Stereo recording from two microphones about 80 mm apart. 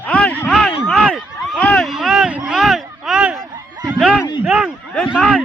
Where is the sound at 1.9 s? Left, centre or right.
Centre.